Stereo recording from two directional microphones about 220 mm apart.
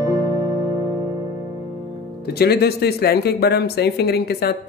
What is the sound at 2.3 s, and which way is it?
Speech, 45° left (ahead or behind).